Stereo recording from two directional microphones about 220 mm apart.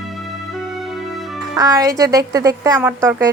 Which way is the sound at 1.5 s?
15° right (ahead or behind).